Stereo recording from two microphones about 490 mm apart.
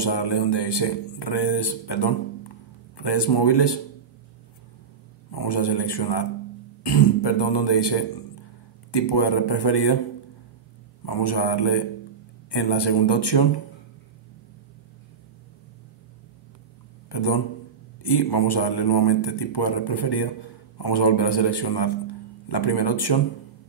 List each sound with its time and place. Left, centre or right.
0.0 s speech: left
5.3 s a man's voice: left
11.1 s a man's voice: left
17.1 s a sound: left
18.0 s speech: left